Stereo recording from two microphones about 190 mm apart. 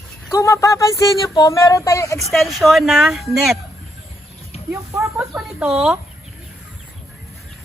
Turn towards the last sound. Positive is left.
turn(degrees=0)  # may be behind; listen again after turning